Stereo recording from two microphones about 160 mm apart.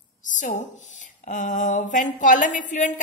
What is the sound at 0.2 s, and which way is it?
A woman's voice, 50° left (ahead or behind).